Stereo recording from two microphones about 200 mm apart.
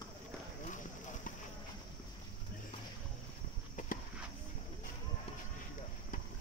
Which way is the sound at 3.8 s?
40° left (ahead or behind).